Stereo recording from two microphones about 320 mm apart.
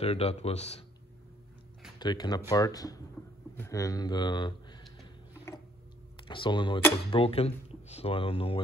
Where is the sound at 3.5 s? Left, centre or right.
Centre.